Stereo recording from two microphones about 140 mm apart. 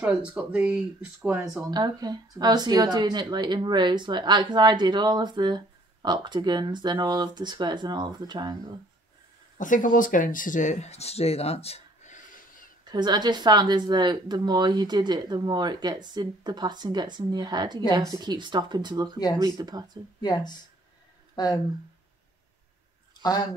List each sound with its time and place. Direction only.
0.0 s speech: 10° right (ahead or behind)
1.7 s speech: 30° right (ahead or behind)
9.6 s speech: 70° left (ahead or behind)
12.8 s speech: 30° right (ahead or behind)
19.1 s speech: 30° left (ahead or behind)
19.4 s speech: 30° right (ahead or behind)
20.2 s speech: 30° left (ahead or behind)